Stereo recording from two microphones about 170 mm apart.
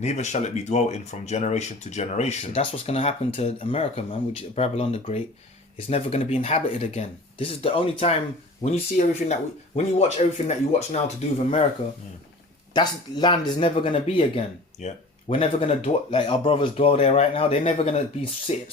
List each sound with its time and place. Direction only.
0.0 s speech: 40° left (ahead or behind)
12.7 s speech: 25° left (ahead or behind)